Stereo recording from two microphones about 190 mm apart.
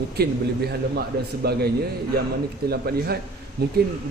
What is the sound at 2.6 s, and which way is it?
Speech, 55° right (ahead or behind).